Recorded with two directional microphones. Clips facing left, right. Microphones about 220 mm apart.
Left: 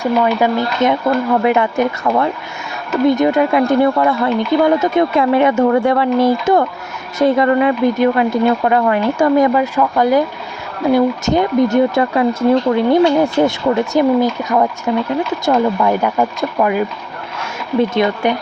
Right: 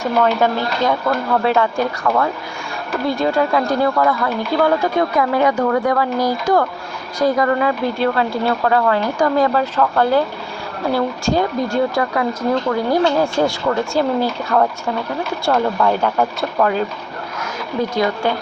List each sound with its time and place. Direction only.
0.0 s speech: 10° left (ahead or behind)
17.7 s speech: 20° left (ahead or behind)